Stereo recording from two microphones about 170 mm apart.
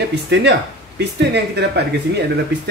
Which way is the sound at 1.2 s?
80° right.